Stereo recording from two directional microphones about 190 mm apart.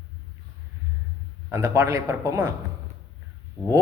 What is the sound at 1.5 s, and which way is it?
Speech, 15° right (ahead or behind).